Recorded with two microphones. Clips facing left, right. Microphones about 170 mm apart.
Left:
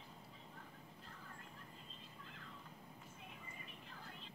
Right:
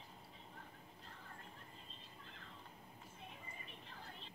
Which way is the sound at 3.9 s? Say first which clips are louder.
Right 1 dB; 30° right (ahead or behind).